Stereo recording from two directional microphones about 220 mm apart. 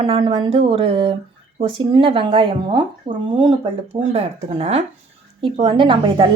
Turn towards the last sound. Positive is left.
turn(degrees=-20)  # may be behind; listen again after turning